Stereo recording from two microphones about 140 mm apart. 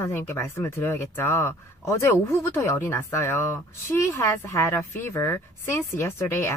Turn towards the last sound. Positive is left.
turn(degrees=15)  # may be behind; listen again after turning